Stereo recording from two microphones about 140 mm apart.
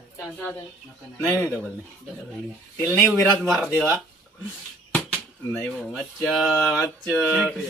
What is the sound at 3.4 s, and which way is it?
Speech, 5° left (ahead or behind).